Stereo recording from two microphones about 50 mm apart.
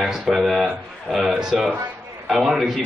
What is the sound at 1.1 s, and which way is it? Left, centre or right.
Speech, centre.